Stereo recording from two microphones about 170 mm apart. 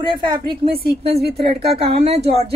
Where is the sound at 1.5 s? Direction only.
35° right (ahead or behind).